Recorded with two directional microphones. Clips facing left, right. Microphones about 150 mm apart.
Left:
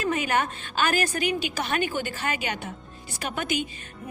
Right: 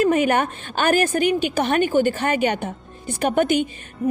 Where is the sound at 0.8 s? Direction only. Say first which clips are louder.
Right 7 dB; 55° right (ahead or behind).